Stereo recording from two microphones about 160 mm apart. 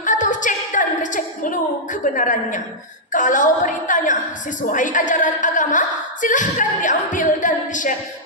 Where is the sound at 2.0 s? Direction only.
55° left (ahead or behind).